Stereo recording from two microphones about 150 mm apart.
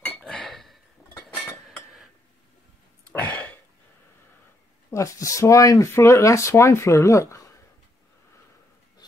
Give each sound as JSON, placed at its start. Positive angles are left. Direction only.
{"t": 0.2, "sound": "cutlery", "side_deg": 0}
{"t": 1.6, "sound": "a sound", "side_deg": -5}
{"t": 3.1, "sound": "throat clearing", "side_deg": 10}
{"t": 4.9, "sound": "speech", "side_deg": 20}